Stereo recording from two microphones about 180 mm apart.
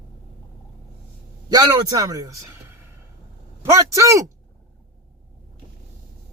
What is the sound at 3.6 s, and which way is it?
Speech, 15° right (ahead or behind).